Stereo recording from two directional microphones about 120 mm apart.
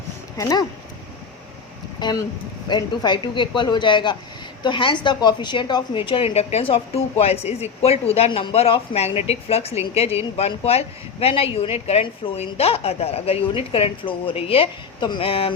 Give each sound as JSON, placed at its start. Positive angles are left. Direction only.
{"t": 0.3, "sound": "speech", "side_deg": 30}
{"t": 2.0, "sound": "a woman's voice", "side_deg": 35}